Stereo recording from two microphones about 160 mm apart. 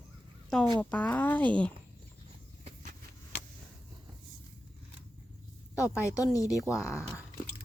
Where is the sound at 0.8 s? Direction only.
10° left (ahead or behind).